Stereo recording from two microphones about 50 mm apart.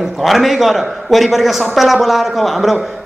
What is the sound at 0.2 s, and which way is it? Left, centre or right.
A man's voice, centre.